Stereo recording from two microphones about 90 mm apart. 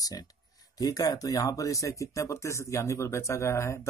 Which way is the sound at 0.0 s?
45° left (ahead or behind).